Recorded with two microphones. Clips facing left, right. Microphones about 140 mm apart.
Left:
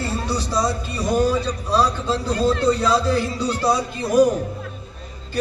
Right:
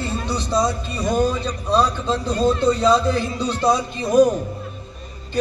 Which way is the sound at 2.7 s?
20° right (ahead or behind).